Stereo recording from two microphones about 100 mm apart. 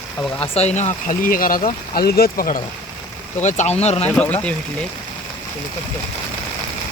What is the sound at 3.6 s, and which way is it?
Speech, 90° left.